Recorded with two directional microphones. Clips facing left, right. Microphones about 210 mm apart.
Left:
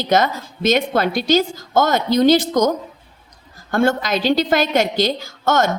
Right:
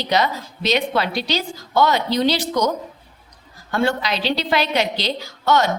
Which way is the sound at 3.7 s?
45° left (ahead or behind).